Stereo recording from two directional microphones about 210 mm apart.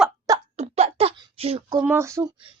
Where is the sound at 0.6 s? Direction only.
30° right (ahead or behind).